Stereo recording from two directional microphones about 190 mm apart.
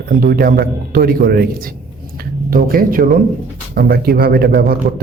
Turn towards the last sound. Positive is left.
turn(degrees=-50)  # may be behind; listen again after turning